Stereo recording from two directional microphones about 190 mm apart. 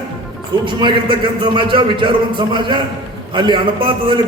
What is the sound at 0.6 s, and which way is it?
A man's voice, 25° right (ahead or behind).